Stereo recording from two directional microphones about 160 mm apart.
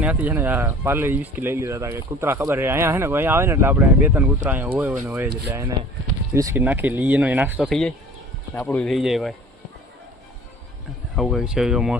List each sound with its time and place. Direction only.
0.0 s speech: 10° right (ahead or behind)
7.7 s speech: 5° left (ahead or behind)
11.2 s speech: centre (ahead or behind)